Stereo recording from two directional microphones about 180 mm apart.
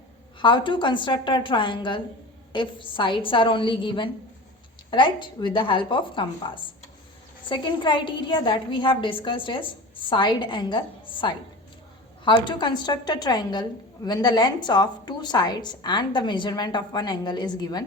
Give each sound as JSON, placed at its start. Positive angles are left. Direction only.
{"t": 0.3, "sound": "a woman's voice", "side_deg": 25}